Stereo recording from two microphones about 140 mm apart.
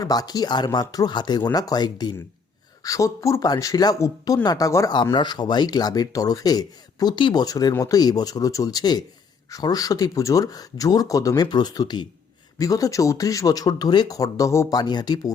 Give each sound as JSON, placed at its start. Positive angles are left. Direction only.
{"t": 0.0, "sound": "speech", "side_deg": 30}